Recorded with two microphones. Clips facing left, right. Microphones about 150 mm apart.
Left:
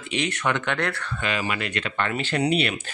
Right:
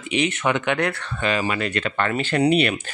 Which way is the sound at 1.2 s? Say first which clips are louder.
Right 5 dB; 35° right (ahead or behind).